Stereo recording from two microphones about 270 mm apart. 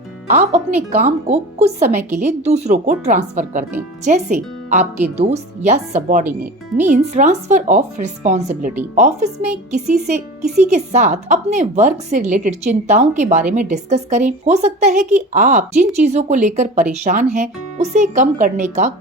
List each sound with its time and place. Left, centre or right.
0.3 s a woman's voice: right